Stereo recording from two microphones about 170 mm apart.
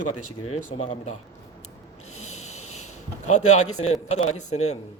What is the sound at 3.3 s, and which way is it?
A man's voice, 40° left (ahead or behind).